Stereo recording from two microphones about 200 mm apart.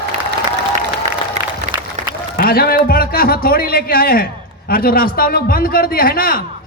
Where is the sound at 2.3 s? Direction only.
50° left (ahead or behind).